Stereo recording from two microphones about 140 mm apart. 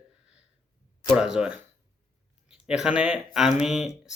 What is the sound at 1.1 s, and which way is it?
Speech, 5° right (ahead or behind).